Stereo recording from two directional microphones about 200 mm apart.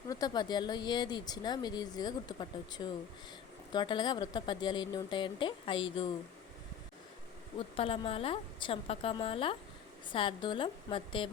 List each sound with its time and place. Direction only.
0.1 s speech: 20° left (ahead or behind)
7.8 s speech: 30° left (ahead or behind)